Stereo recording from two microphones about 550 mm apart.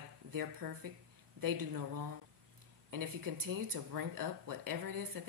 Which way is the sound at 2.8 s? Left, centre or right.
Right.